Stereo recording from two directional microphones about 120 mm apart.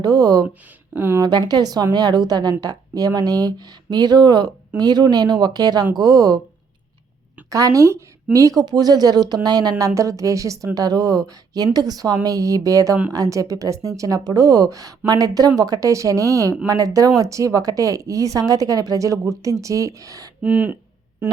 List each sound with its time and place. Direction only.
0.0 s a woman's voice: 35° right (ahead or behind)
0.9 s a woman's voice: 20° right (ahead or behind)
1.2 s a woman's voice: 35° right (ahead or behind)
7.5 s a woman's voice: 30° right (ahead or behind)
20.4 s speech: 10° right (ahead or behind)